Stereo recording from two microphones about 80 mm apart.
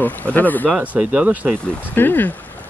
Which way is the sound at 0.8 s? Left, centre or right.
Centre.